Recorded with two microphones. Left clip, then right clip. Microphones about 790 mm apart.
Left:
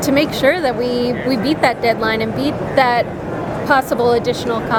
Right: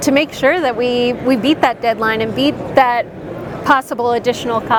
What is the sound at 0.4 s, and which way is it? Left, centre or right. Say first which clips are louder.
Speech: right 1 dB; right.